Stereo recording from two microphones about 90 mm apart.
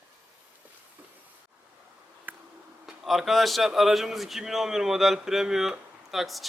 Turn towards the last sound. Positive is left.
turn(degrees=0)  # may be behind; listen again after turning